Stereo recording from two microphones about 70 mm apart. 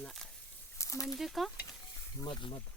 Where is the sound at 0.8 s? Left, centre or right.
Left.